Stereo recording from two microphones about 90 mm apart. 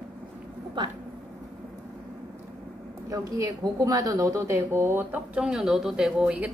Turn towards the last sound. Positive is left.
turn(degrees=-10)  # may be behind; listen again after turning